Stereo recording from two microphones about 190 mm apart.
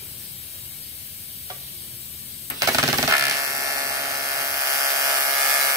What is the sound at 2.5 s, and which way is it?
Electric shaver, 15° right (ahead or behind).